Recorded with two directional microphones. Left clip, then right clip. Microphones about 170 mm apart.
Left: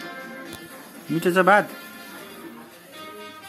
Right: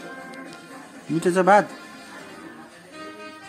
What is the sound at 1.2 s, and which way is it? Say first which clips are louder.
Speech: even; centre (ahead or behind).